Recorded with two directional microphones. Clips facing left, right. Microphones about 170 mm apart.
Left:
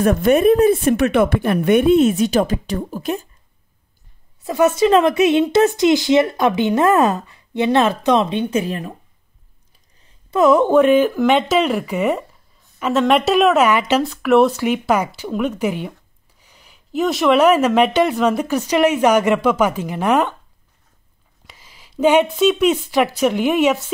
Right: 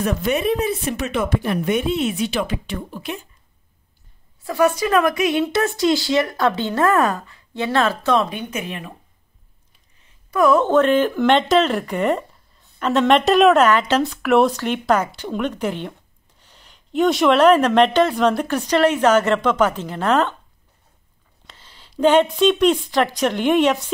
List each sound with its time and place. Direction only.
0.0 s speech: 50° left (ahead or behind)
4.4 s speech: 20° left (ahead or behind); by 8.9 s 35° left (ahead or behind)
10.3 s speech: 20° left (ahead or behind)
21.5 s a woman's voice: 10° left (ahead or behind)